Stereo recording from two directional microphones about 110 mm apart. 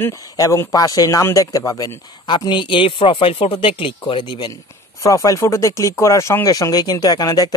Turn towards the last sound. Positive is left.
turn(degrees=35)  # may be behind; listen again after turning